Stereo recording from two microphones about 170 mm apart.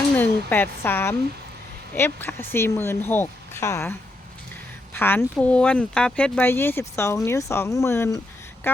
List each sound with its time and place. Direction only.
0.2 s speech: 10° left (ahead or behind)
4.9 s speech: 15° left (ahead or behind)